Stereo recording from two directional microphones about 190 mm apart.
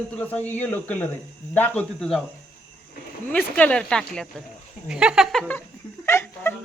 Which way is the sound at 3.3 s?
10° left (ahead or behind).